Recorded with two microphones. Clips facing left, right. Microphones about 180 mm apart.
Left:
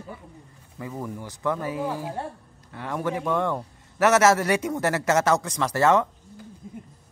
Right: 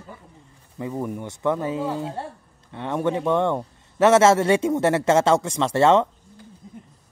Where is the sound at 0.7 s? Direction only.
20° right (ahead or behind).